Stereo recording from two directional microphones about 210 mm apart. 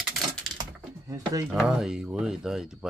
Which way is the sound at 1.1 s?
15° right (ahead or behind).